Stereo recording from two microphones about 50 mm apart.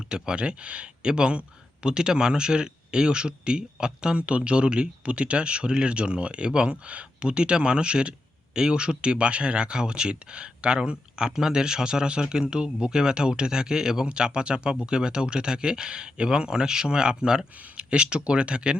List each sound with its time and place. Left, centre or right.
0.1 s speech: centre